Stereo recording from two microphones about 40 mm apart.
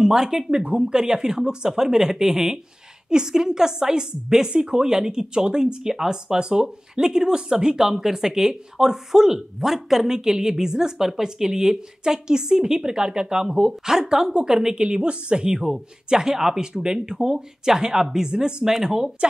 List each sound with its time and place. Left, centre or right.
0.0 s speech: centre
14.9 s a woman's voice: right